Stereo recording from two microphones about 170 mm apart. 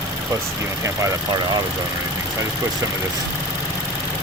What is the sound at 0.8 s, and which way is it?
Speech, 20° right (ahead or behind).